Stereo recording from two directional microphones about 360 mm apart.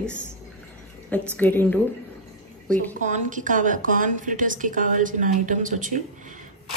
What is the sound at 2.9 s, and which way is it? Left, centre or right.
A woman's voice, right.